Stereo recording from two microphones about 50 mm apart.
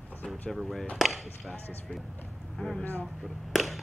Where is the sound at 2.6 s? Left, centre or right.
Centre.